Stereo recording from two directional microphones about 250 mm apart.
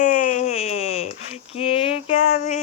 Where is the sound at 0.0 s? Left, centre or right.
Left.